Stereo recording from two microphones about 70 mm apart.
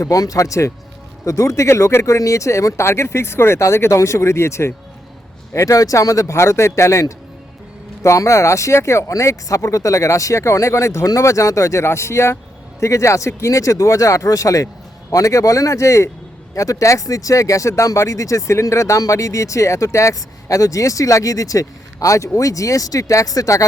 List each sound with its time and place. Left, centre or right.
0.0 s speech: left
5.5 s speech: left